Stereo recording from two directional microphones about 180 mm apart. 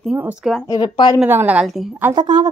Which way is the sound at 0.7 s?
25° left (ahead or behind).